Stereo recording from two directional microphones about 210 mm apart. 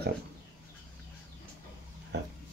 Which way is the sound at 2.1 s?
55° right (ahead or behind).